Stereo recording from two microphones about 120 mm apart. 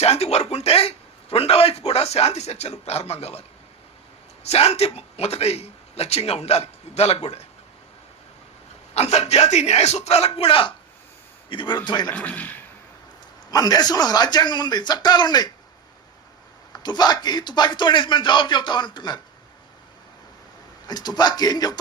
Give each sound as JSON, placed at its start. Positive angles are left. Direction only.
{"t": 0.0, "sound": "a sound", "side_deg": 60}
{"t": 4.4, "sound": "a man's voice", "side_deg": 60}
{"t": 9.0, "sound": "a man's voice", "side_deg": 65}
{"t": 12.0, "sound": "speech", "side_deg": 10}
{"t": 13.5, "sound": "a man's voice", "side_deg": 30}
{"t": 16.7, "sound": "a man's voice", "side_deg": 35}
{"t": 20.8, "sound": "a man's voice", "side_deg": 35}